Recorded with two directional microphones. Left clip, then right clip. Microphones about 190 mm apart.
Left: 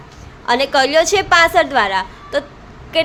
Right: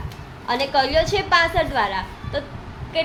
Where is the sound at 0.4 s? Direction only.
30° left (ahead or behind).